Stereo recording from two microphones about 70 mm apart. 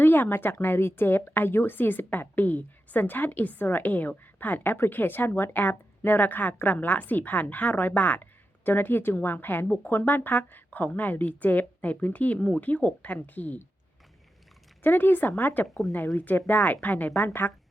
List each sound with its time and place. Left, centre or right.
0.0 s a woman's voice: left
14.8 s a woman's voice: left
15.6 s speech: centre
16.1 s a woman's voice: left